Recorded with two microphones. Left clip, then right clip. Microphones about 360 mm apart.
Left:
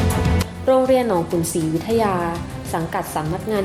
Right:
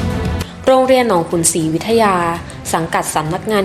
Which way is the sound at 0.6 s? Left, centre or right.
Left.